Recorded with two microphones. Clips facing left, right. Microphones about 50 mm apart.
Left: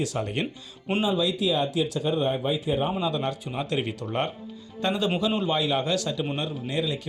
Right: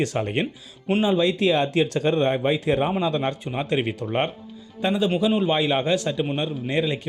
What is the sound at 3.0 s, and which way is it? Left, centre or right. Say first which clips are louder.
Speech: right 3 dB; right.